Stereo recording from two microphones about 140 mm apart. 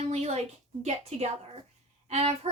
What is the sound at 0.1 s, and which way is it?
A woman's voice, 55° right (ahead or behind).